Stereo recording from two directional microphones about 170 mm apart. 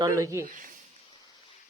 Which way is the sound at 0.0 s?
20° right (ahead or behind).